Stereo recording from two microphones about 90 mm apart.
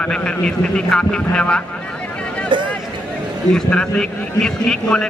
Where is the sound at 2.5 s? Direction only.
65° right (ahead or behind).